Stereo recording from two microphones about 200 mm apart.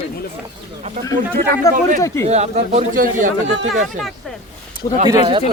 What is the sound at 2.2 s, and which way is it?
Speech, 35° right (ahead or behind).